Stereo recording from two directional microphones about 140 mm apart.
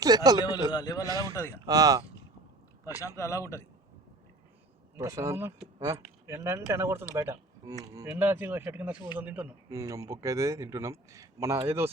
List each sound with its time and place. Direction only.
0.0 s speech: 25° right (ahead or behind)
0.7 s a man's voice: 25° left (ahead or behind)
1.0 s speech: 25° right (ahead or behind)
1.3 s a man's voice: 20° left (ahead or behind)
1.6 s speech: 25° right (ahead or behind)
3.2 s a man's voice: 20° left (ahead or behind)
4.9 s speech: 25° right (ahead or behind)
9.6 s speech: 20° right (ahead or behind)